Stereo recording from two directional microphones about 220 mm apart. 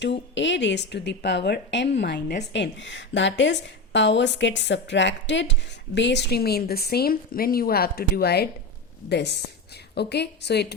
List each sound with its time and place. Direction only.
0.0 s a woman's voice: 55° left (ahead or behind)